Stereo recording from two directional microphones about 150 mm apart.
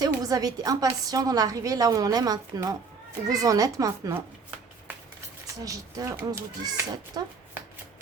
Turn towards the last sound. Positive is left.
turn(degrees=-20)  # may be behind; listen again after turning